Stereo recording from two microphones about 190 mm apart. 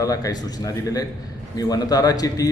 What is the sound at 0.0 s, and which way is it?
Speech, 20° left (ahead or behind).